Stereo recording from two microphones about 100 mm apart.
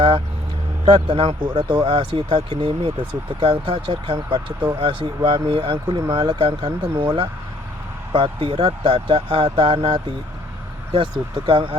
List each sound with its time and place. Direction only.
0.9 s speech: 65° right (ahead or behind); by 2.9 s 85° right
3.4 s speech: 65° right (ahead or behind)
5.7 s speech: 50° right (ahead or behind)
8.1 s speech: 60° right (ahead or behind)